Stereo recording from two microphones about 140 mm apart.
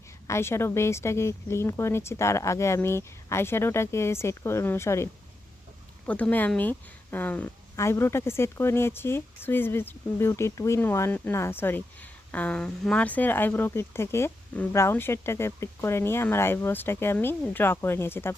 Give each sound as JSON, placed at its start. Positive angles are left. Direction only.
{"t": 0.3, "sound": "speech", "side_deg": 20}
{"t": 6.1, "sound": "a woman's voice", "side_deg": 10}